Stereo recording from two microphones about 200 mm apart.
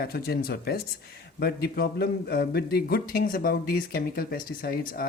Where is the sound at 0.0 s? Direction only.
50° left (ahead or behind).